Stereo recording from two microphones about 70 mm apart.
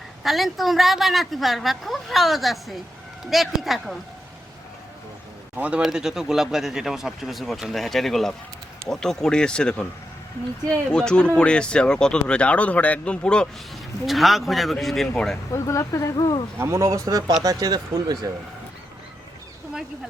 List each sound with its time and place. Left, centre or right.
0.2 s a woman's voice: centre
5.5 s a man's voice: right
5.8 s a woman's voice: centre
10.9 s speech: centre
14.1 s a woman's voice: centre
15.5 s speech: left
16.1 s speech: left
16.6 s speech: right